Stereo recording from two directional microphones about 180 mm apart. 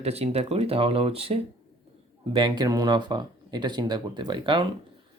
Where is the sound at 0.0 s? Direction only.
35° right (ahead or behind).